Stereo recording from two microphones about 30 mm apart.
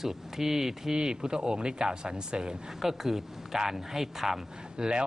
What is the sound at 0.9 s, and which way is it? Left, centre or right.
Speech, right.